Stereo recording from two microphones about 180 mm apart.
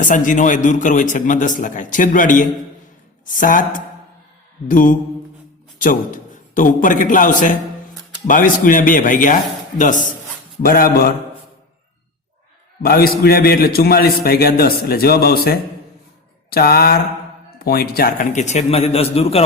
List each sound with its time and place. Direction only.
0.0 s a man's voice: 45° left (ahead or behind)
12.8 s a man's voice: 55° left (ahead or behind); by 19.4 s 35° left (ahead or behind)